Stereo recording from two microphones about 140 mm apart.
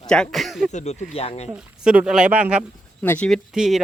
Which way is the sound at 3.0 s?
10° left (ahead or behind).